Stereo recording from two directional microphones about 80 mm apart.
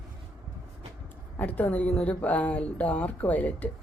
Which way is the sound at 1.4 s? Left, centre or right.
Left.